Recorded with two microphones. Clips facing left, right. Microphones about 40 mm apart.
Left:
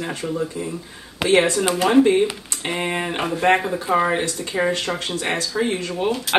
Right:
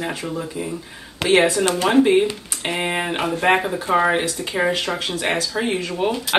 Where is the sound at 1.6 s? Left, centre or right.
Centre.